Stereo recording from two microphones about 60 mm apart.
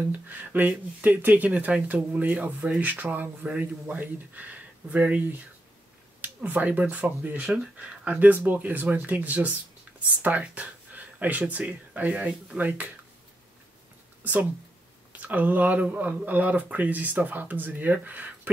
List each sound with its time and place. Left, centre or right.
0.0 s speech: right
6.2 s speech: right
12.5 s speech: right
14.2 s speech: right